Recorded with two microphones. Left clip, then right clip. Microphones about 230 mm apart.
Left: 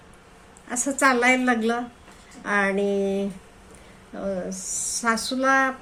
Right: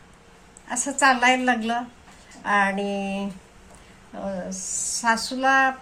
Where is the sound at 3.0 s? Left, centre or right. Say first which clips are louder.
Left 5 dB; right.